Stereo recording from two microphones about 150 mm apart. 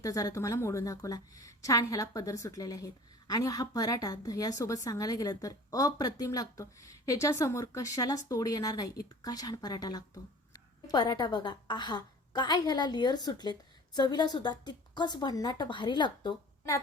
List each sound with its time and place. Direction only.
0.0 s a woman's voice: 25° left (ahead or behind)